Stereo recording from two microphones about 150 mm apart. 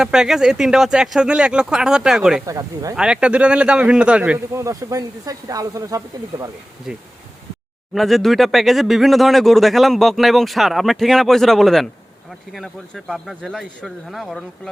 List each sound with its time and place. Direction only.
0.0 s speech: 5° right (ahead or behind)
2.5 s speech: 25° right (ahead or behind)
2.9 s a man's voice: 5° right (ahead or behind)
4.5 s speech: 20° right (ahead or behind)
7.9 s speech: centre (ahead or behind)